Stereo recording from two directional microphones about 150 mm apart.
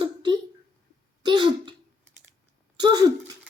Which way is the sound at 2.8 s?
30° right (ahead or behind).